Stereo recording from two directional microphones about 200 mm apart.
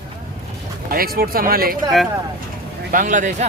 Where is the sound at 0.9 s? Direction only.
50° right (ahead or behind).